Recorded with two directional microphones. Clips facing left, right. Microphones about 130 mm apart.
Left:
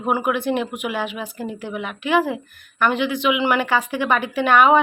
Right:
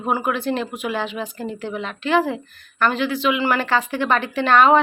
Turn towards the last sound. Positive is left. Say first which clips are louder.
# even
turn(degrees=10)  # may be behind; listen again after turning